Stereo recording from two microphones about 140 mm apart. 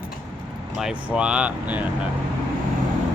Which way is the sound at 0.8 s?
5° right (ahead or behind).